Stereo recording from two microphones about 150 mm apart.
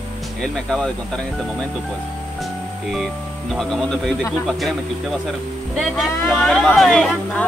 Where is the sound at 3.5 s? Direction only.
Centre (ahead or behind).